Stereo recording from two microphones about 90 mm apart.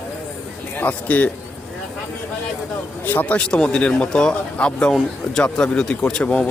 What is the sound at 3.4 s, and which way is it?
Speech, 10° left (ahead or behind).